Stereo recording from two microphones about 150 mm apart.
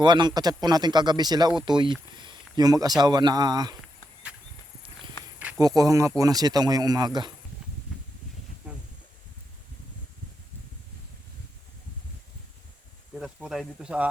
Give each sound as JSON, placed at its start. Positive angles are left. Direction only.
{"t": 0.0, "sound": "speech", "side_deg": -30}
{"t": 5.5, "sound": "speech", "side_deg": -25}
{"t": 8.7, "sound": "a sound", "side_deg": -10}
{"t": 13.1, "sound": "speech", "side_deg": -5}